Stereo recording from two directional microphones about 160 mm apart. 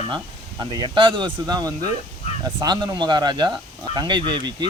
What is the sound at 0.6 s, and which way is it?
Speech, 25° right (ahead or behind).